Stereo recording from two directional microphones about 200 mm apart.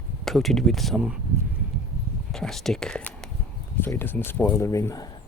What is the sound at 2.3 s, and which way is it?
Speech, centre (ahead or behind).